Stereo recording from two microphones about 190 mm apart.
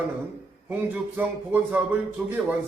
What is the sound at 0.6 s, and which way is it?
A man's voice, 10° right (ahead or behind).